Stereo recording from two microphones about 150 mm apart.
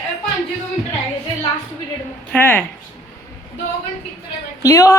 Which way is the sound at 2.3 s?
15° left (ahead or behind).